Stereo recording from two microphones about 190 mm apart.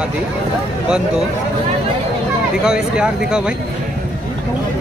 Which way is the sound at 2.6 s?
5° right (ahead or behind).